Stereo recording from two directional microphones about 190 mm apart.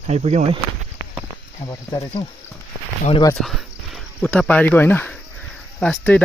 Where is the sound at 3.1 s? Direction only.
20° left (ahead or behind).